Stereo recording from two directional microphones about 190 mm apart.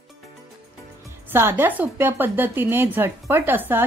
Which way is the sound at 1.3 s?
10° right (ahead or behind).